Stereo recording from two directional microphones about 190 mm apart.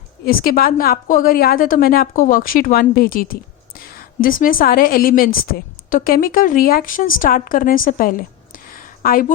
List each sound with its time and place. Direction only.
0.3 s a woman's voice: 50° left (ahead or behind)